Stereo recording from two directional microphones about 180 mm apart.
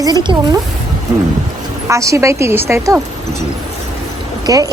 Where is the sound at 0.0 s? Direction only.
25° right (ahead or behind).